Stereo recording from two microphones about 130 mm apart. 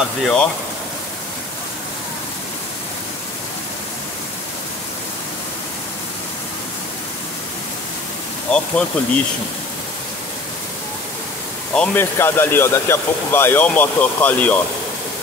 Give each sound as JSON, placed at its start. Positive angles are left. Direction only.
{"t": 0.2, "sound": "speech", "side_deg": 5}
{"t": 8.5, "sound": "speech", "side_deg": 10}
{"t": 11.7, "sound": "speech", "side_deg": 5}
{"t": 12.0, "sound": "speech", "side_deg": 20}